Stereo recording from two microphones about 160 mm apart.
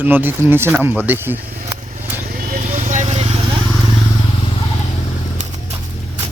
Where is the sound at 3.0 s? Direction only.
40° right (ahead or behind).